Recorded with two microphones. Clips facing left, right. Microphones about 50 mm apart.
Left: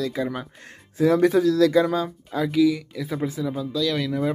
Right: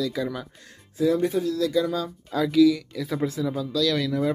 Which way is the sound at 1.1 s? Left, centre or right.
Left.